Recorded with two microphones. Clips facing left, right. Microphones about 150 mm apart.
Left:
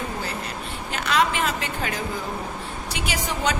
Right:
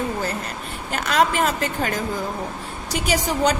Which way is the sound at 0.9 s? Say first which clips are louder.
Right 3 dB; 45° right (ahead or behind).